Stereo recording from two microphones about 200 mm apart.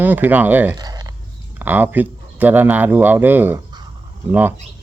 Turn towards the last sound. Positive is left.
turn(degrees=-10)  # may be behind; listen again after turning